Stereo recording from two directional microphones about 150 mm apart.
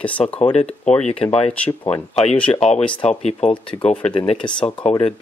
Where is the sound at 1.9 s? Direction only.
45° left (ahead or behind).